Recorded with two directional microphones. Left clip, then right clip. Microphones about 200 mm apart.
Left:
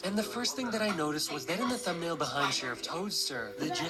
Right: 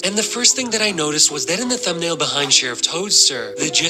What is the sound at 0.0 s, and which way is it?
Speech, 50° right (ahead or behind).